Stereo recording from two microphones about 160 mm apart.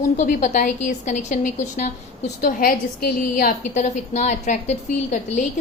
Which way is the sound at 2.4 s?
65° left (ahead or behind).